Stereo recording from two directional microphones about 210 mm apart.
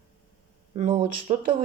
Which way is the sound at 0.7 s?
30° right (ahead or behind).